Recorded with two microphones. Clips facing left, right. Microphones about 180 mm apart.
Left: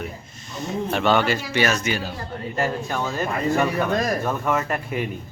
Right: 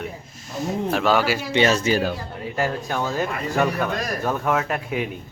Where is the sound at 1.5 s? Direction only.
25° right (ahead or behind).